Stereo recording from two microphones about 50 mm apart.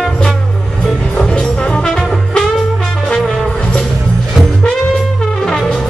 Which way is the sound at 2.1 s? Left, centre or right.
Centre.